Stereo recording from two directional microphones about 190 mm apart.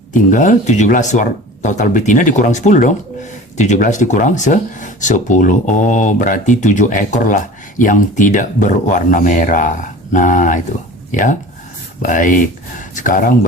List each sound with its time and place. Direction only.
0.1 s speech: 45° left (ahead or behind)